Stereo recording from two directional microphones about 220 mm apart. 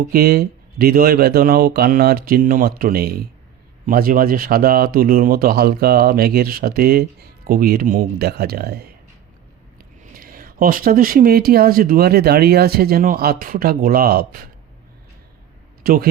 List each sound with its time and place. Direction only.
0.1 s speech: 45° right (ahead or behind)
10.0 s speech: 40° right (ahead or behind)
15.8 s speech: 40° right (ahead or behind)